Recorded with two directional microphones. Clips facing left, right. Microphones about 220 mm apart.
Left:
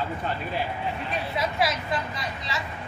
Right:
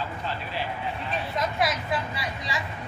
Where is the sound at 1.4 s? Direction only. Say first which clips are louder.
Even; centre (ahead or behind).